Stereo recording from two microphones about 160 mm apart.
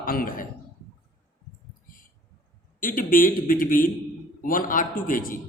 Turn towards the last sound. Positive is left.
turn(degrees=60)  # may be behind; listen again after turning